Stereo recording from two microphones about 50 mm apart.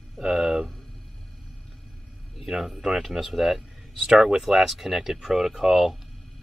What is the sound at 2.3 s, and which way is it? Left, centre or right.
Speech, centre.